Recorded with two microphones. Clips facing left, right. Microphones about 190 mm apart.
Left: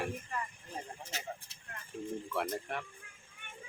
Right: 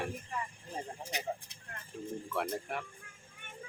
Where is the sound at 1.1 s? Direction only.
15° right (ahead or behind).